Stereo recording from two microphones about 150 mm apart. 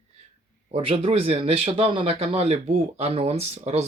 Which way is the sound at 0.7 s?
35° right (ahead or behind).